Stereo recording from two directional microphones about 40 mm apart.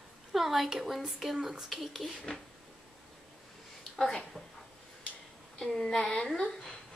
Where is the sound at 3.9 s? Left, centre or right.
Centre.